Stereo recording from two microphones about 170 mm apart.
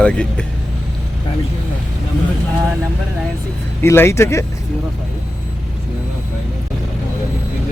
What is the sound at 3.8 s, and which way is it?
Speech, 15° left (ahead or behind).